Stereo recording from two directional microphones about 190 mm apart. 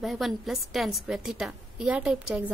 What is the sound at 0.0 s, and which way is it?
A woman's voice, centre (ahead or behind).